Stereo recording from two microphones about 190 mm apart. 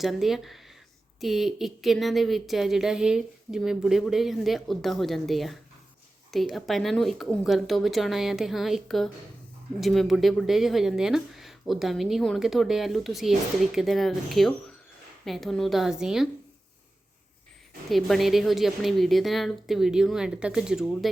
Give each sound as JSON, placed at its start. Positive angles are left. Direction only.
{"t": 0.0, "sound": "speech", "side_deg": 0}
{"t": 17.8, "sound": "speech", "side_deg": 0}